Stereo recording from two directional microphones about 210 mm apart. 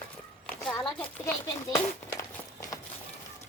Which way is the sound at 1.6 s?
15° left (ahead or behind).